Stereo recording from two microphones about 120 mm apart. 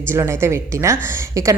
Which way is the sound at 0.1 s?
20° right (ahead or behind).